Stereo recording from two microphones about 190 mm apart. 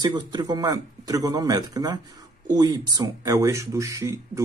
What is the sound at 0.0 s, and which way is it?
Speech, 20° right (ahead or behind).